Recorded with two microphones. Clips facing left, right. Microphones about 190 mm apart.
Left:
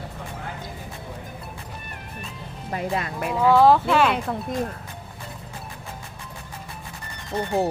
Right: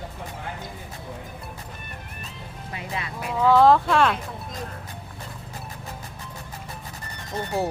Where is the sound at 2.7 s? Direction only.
45° left (ahead or behind).